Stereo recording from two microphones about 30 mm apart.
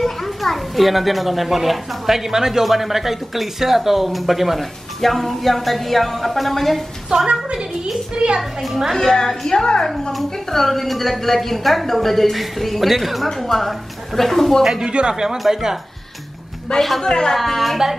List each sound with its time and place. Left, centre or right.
0.0 s a child's voice: centre
5.0 s a child's voice: centre
7.1 s a child's voice: right
8.5 s speech: centre
8.9 s a woman's voice: centre
10.5 s a child's voice: centre
14.6 s speech: centre
14.9 s a child's voice: right
15.5 s speech: centre
16.7 s a woman's voice: left
17.5 s a child's voice: centre